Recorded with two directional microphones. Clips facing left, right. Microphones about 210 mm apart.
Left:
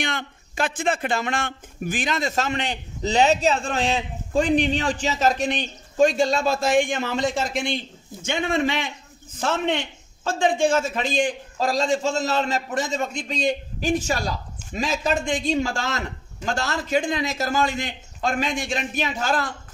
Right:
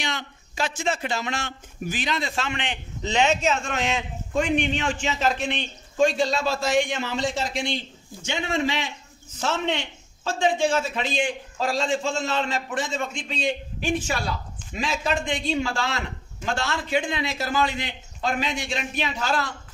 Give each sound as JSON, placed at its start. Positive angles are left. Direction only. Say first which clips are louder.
{"t": 0.0, "sound": "a man's voice", "louder": "left 3 dB", "side_deg": 55}